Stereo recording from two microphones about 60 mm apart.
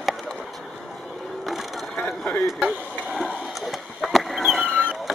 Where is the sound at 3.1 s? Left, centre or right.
Centre.